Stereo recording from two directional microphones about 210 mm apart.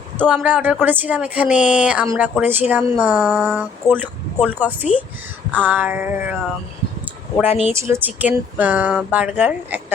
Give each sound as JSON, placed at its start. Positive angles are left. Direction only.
{"t": 0.2, "sound": "a woman's voice", "side_deg": -5}
{"t": 3.9, "sound": "a woman's voice", "side_deg": -10}
{"t": 7.4, "sound": "speech", "side_deg": 30}
{"t": 8.0, "sound": "a woman's voice", "side_deg": -10}